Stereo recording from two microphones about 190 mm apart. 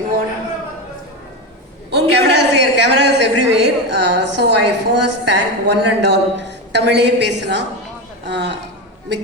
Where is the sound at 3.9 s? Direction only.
65° right (ahead or behind).